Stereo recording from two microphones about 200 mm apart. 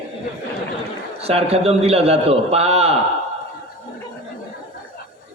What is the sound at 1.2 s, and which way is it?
A man's voice, 30° right (ahead or behind).